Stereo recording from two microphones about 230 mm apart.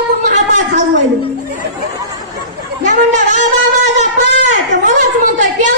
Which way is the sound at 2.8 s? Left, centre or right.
Right.